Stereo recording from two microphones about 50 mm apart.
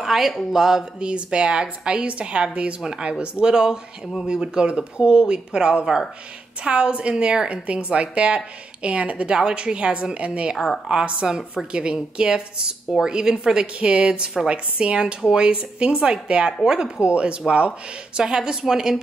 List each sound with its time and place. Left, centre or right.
0.0 s a woman's voice: centre; by 18.2 s right
18.2 s a woman's voice: centre